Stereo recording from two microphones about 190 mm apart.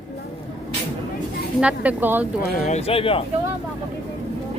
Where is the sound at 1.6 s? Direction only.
5° right (ahead or behind).